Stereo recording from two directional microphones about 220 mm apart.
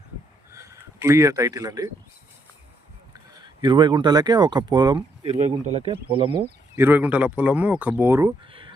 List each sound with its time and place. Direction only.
0.5 s speech: 15° right (ahead or behind)
3.3 s speech: 20° right (ahead or behind)
6.7 s speech: 10° right (ahead or behind)